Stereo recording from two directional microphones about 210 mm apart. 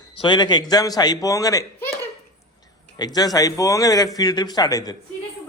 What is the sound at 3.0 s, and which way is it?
Speech, 20° left (ahead or behind).